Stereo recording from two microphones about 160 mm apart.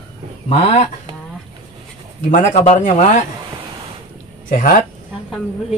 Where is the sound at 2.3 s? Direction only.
50° left (ahead or behind).